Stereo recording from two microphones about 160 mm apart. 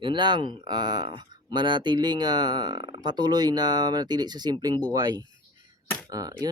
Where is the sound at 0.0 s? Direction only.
30° right (ahead or behind).